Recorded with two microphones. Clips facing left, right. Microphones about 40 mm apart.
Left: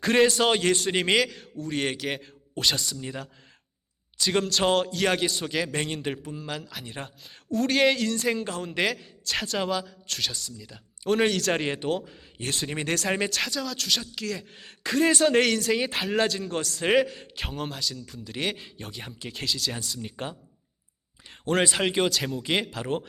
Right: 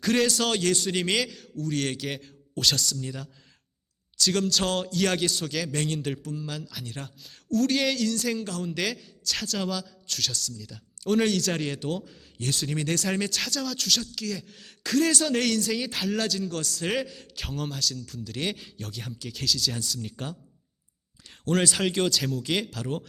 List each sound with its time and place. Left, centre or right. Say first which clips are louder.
0.0 s speech: left 3 dB; left
1.2 s speech: left 3 dB; centre
1.6 s speech: left 1 dB; left
21.6 s speech: left 2 dB; centre